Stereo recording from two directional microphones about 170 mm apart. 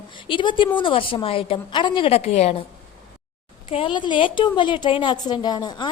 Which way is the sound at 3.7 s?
30° left (ahead or behind).